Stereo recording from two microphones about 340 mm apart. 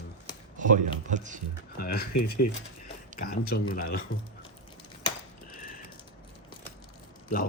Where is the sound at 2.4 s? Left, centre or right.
Left.